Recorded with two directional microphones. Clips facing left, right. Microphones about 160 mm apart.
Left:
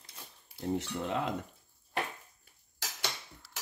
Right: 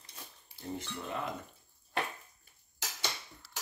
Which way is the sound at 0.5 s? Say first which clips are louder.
Left 7 dB; 70° left (ahead or behind).